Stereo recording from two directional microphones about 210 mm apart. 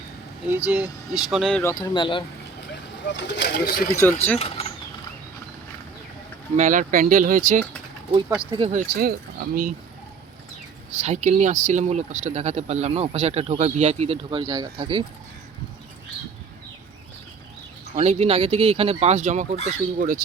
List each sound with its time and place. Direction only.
0.4 s speech: 5° right (ahead or behind)
1.7 s speech: 20° left (ahead or behind)
3.0 s speech: 55° left (ahead or behind)
4.4 s a sound: 25° left (ahead or behind)
6.6 s speech: 40° right (ahead or behind)
8.7 s speech: 45° right (ahead or behind)
11.0 s speech: 35° right (ahead or behind)
17.9 s speech: 30° right (ahead or behind)